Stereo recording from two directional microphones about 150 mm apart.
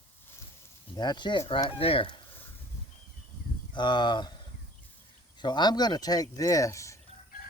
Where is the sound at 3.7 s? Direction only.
30° left (ahead or behind).